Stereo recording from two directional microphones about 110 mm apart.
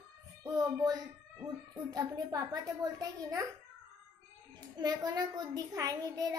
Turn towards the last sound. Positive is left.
turn(degrees=-35)  # may be behind; listen again after turning